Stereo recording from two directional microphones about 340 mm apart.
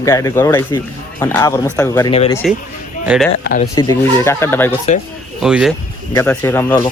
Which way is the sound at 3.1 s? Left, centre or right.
Centre.